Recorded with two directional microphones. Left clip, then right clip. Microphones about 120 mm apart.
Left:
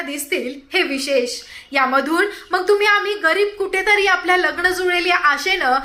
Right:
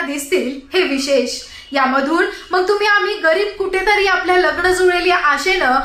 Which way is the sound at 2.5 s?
25° left (ahead or behind).